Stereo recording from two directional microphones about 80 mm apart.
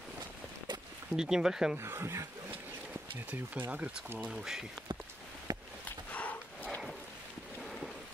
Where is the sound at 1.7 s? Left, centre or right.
Right.